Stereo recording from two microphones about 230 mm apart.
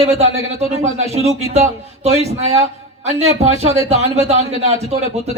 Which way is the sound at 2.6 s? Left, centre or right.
Right.